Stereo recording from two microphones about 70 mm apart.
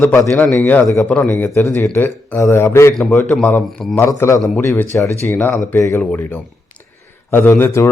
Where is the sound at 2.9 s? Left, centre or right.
Centre.